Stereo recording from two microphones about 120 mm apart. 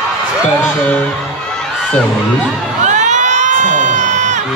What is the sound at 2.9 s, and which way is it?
Crowd, 90° right.